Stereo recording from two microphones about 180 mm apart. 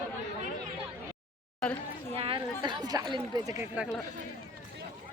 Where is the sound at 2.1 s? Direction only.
30° right (ahead or behind).